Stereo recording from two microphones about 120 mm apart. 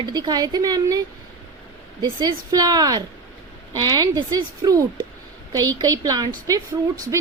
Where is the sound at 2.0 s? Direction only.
35° right (ahead or behind).